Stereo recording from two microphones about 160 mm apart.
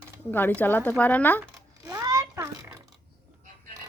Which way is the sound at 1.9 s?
25° right (ahead or behind).